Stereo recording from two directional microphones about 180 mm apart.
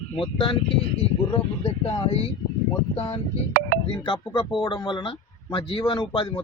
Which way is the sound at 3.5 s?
55° right (ahead or behind).